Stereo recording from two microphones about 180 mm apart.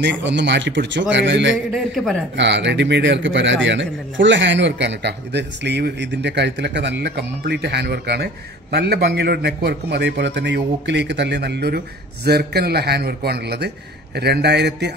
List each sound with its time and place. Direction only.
0.0 s speech: 80° right
2.0 s a man's voice: centre (ahead or behind)
2.3 s a man's voice: 80° right